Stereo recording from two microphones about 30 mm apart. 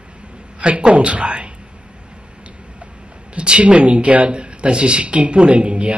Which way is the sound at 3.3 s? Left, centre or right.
Right.